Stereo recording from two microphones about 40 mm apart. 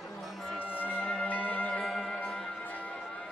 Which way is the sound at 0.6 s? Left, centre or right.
Left.